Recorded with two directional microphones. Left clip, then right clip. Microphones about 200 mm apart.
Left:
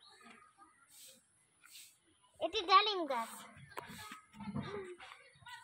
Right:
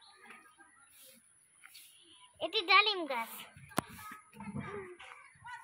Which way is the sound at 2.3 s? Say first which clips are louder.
Right 2 dB; 15° right (ahead or behind).